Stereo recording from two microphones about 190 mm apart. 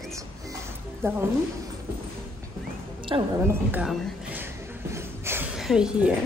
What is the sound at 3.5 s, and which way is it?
Speech, 10° right (ahead or behind).